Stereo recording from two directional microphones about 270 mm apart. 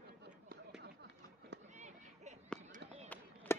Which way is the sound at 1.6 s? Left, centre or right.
Right.